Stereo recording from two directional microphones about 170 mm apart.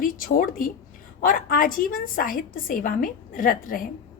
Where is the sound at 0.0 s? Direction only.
55° left (ahead or behind).